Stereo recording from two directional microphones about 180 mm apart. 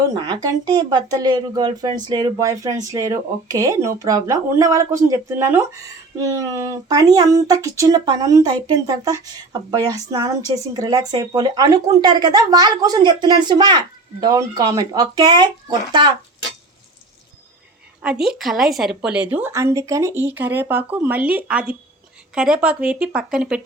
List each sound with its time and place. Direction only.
0.0 s speech: 20° right (ahead or behind)
18.0 s a woman's voice: 5° right (ahead or behind)